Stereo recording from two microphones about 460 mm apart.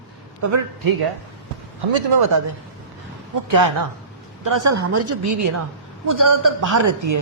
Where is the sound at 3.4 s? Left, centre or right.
Right.